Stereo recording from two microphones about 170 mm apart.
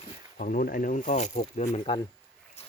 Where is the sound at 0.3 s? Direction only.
55° left (ahead or behind); by 2.0 s 35° left (ahead or behind).